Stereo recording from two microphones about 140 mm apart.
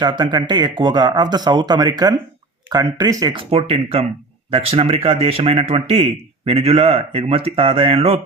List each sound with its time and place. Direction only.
0.0 s speech: 30° right (ahead or behind)
3.5 s speech: 45° right (ahead or behind)